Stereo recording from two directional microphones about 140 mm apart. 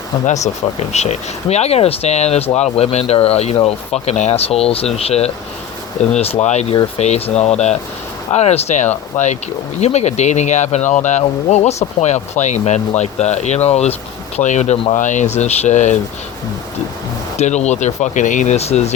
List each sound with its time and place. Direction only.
0.9 s speech: 50° left (ahead or behind)
17.3 s speech: 55° left (ahead or behind)